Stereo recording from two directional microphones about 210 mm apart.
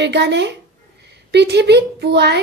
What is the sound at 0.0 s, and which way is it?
A woman's voice, 55° right (ahead or behind).